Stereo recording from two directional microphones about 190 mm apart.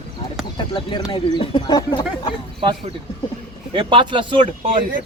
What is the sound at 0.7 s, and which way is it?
Speech, 25° left (ahead or behind).